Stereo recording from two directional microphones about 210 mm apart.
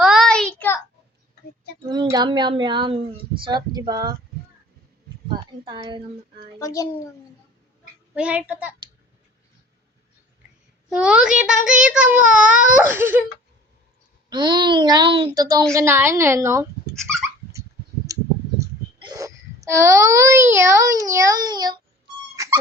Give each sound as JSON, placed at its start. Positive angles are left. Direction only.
{"t": 0.0, "sound": "child singing", "side_deg": 0}
{"t": 1.9, "sound": "a woman's voice", "side_deg": -20}
{"t": 5.3, "sound": "speech", "side_deg": -20}
{"t": 6.6, "sound": "a child's voice", "side_deg": 15}
{"t": 8.1, "sound": "a woman's voice", "side_deg": -5}
{"t": 10.8, "sound": "a child's voice", "side_deg": -5}
{"t": 14.3, "sound": "a woman's voice", "side_deg": -20}
{"t": 16.9, "sound": "dog", "side_deg": 0}
{"t": 18.1, "sound": "a sound", "side_deg": -15}
{"t": 18.6, "sound": "a child's voice", "side_deg": -20}
{"t": 22.4, "sound": "dog", "side_deg": -15}